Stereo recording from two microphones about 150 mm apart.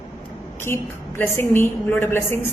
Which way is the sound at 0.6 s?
15° left (ahead or behind).